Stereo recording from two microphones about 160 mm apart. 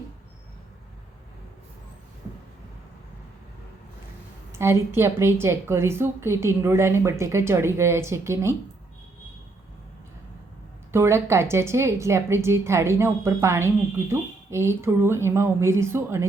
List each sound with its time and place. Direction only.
4.5 s a woman's voice: 15° right (ahead or behind)
10.9 s a woman's voice: 15° right (ahead or behind)